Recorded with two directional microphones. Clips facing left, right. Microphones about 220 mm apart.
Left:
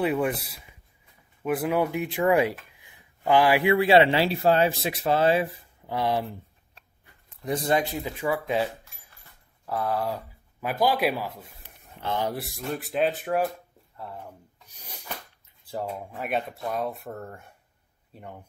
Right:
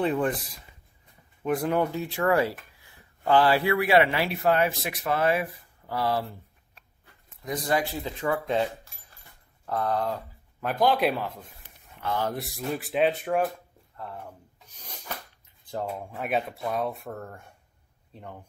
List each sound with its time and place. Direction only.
0.0 s speech: 10° left (ahead or behind)
3.7 s speech: 25° left (ahead or behind)
7.4 s speech: 25° left (ahead or behind); by 8.6 s 10° left (ahead or behind)
9.7 s speech: 5° left (ahead or behind)
14.7 s a sound: 10° left (ahead or behind)
15.9 s speech: centre (ahead or behind)